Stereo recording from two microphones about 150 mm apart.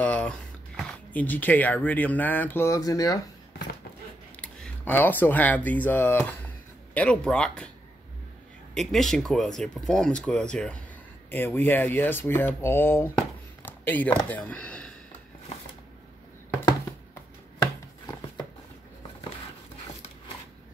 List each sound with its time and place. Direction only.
0.0 s speech: 10° left (ahead or behind); by 3.2 s 25° left (ahead or behind)
4.4 s speech: 10° left (ahead or behind)
8.7 s speech: centre (ahead or behind)
17.1 s a sound: 20° left (ahead or behind)